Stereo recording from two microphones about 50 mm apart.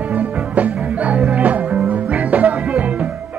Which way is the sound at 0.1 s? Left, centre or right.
Right.